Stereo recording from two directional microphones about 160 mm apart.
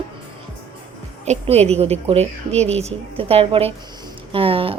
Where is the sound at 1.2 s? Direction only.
40° right (ahead or behind).